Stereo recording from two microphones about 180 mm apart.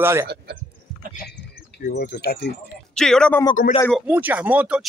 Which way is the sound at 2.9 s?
5° left (ahead or behind).